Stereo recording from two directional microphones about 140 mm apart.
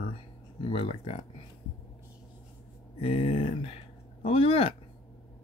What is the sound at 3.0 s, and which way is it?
Speech, 40° left (ahead or behind).